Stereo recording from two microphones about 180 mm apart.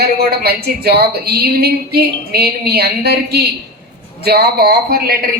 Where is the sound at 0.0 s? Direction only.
60° right (ahead or behind).